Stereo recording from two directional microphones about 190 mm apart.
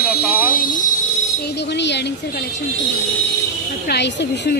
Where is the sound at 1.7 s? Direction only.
65° left (ahead or behind).